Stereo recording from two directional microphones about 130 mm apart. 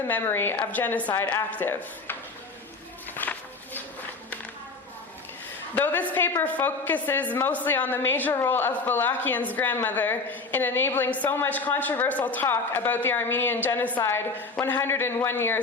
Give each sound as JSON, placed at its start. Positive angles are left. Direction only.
{"t": 0.1, "sound": "a woman's voice", "side_deg": 15}
{"t": 3.2, "sound": "a sound", "side_deg": 15}
{"t": 5.7, "sound": "a woman's voice", "side_deg": 15}